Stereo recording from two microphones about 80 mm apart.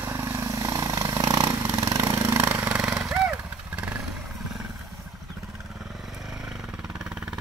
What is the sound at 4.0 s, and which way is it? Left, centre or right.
Vehicle, centre.